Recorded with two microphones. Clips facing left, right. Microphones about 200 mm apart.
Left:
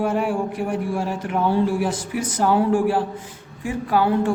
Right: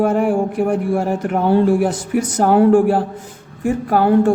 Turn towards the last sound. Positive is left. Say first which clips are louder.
# right 5 dB
turn(degrees=-50)  # may be behind; listen again after turning